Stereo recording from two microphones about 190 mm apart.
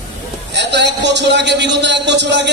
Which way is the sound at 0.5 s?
65° right (ahead or behind).